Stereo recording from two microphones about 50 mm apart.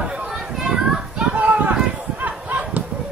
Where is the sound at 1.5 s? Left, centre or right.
Right.